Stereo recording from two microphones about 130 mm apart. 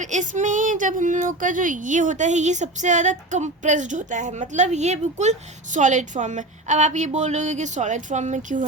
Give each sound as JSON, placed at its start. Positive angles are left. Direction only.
{"t": 0.0, "sound": "speech", "side_deg": -70}